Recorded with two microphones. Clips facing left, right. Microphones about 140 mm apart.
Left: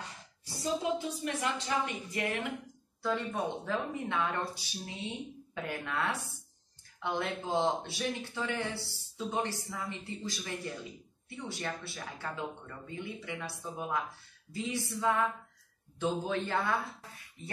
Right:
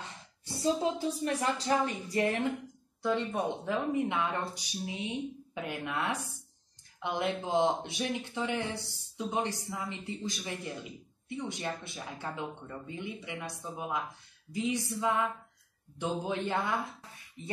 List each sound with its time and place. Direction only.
0.5 s a woman's voice: 30° right (ahead or behind)
3.0 s speech: 15° right (ahead or behind)